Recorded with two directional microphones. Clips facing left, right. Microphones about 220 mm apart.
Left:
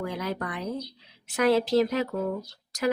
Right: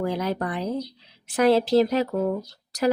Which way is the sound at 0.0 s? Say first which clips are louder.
Right 5 dB; 30° right (ahead or behind).